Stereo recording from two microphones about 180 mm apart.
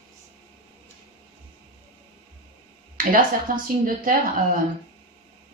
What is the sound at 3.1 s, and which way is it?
Speech, 50° right (ahead or behind).